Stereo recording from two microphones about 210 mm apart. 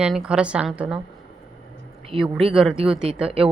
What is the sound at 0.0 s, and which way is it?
Speech, 5° right (ahead or behind).